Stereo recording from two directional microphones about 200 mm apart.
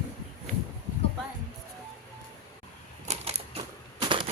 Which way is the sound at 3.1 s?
30° right (ahead or behind).